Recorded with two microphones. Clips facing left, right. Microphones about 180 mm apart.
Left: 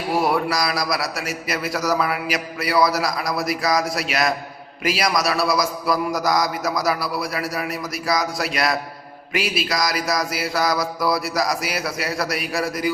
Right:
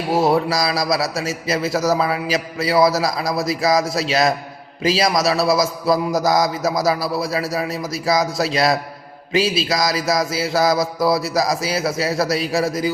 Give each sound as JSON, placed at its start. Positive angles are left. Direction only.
{"t": 0.1, "sound": "a man's voice", "side_deg": -25}